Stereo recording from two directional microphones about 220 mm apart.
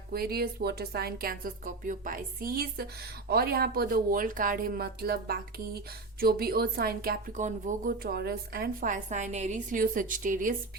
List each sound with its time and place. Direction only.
0.1 s speech: 45° right (ahead or behind)